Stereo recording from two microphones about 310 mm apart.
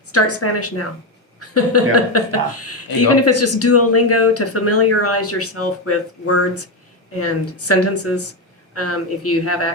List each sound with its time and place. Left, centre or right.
0.1 s speech: left